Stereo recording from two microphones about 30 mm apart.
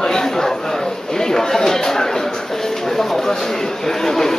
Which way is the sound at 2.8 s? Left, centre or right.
Centre.